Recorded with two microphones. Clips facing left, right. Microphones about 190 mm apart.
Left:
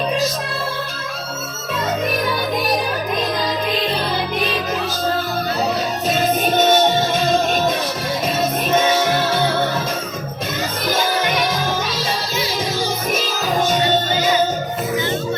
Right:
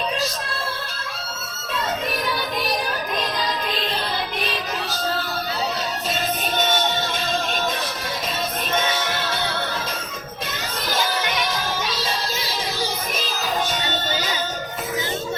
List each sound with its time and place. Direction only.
6.1 s music: 45° left (ahead or behind)